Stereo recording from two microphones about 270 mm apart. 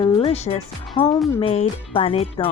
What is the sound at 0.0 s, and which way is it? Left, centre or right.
Music, left.